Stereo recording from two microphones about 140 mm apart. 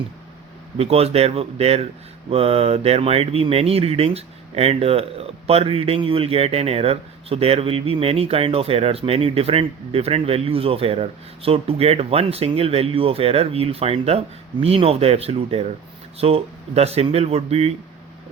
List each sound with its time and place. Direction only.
0.8 s speech: 45° right (ahead or behind)